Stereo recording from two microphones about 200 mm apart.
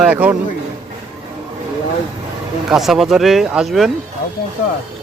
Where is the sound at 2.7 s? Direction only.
Centre (ahead or behind).